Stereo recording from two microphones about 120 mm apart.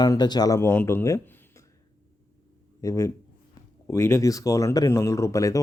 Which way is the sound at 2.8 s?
25° left (ahead or behind).